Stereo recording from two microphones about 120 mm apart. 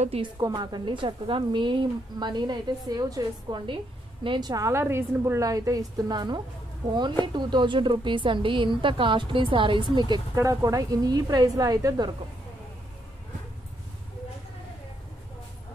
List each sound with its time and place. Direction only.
0.4 s a woman's voice: 35° right (ahead or behind)